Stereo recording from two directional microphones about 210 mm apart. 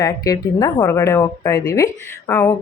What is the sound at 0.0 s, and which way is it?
A woman's voice, 15° left (ahead or behind).